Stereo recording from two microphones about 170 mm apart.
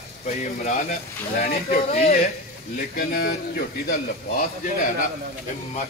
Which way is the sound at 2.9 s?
60° left (ahead or behind).